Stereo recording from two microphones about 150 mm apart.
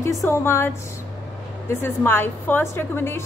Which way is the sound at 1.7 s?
15° left (ahead or behind).